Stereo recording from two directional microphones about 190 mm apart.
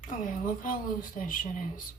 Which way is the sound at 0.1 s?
45° left (ahead or behind).